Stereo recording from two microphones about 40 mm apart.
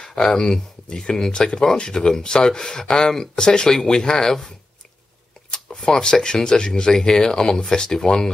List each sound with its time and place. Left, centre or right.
0.2 s speech: centre
5.8 s speech: centre